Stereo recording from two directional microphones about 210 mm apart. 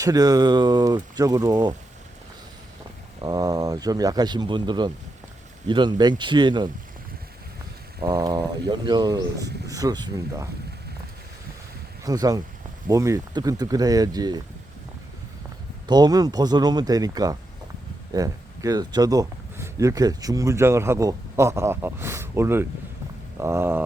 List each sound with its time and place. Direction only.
0.0 s speech: 15° right (ahead or behind)
3.2 s speech: 20° right (ahead or behind)
8.0 s speech: 20° right (ahead or behind)
12.0 s speech: 15° right (ahead or behind)
15.9 s speech: 20° right (ahead or behind)